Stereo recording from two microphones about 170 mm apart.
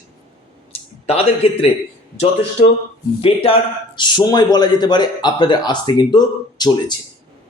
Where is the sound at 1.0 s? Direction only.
35° left (ahead or behind).